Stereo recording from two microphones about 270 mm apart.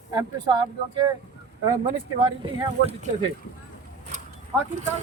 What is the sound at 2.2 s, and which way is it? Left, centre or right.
Speech, centre.